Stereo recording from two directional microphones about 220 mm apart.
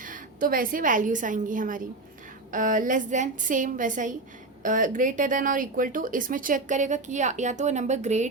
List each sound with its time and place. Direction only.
0.0 s a woman's voice: 40° right (ahead or behind)